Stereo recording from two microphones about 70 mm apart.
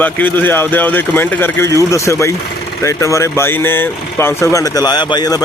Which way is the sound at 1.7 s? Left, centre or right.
Left.